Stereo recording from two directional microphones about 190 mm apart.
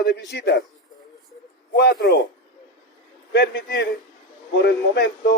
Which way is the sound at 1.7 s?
55° left (ahead or behind).